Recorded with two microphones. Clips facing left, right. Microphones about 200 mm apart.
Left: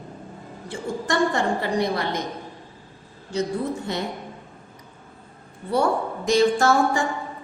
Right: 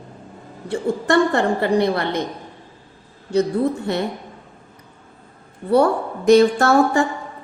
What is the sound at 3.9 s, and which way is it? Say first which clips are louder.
Speech: right 6 dB; 60° right (ahead or behind).